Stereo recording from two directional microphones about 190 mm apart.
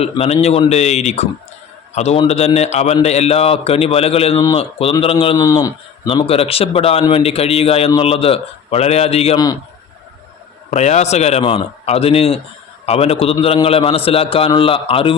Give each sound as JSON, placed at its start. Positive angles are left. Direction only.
{"t": 0.0, "sound": "a man's voice", "side_deg": 35}
{"t": 10.7, "sound": "a man's voice", "side_deg": 35}